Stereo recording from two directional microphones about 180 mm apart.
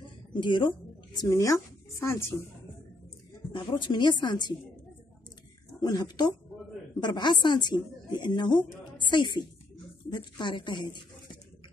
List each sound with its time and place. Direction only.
0.0 s a sound: 25° left (ahead or behind)
1.1 s speech: 20° left (ahead or behind)
3.5 s a woman's voice: 25° left (ahead or behind)
5.8 s a woman's voice: 20° left (ahead or behind)